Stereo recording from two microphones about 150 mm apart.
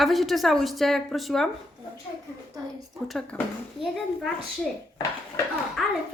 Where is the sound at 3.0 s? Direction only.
5° left (ahead or behind).